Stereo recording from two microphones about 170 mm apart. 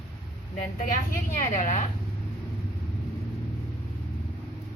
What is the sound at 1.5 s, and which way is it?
Speech, 45° left (ahead or behind).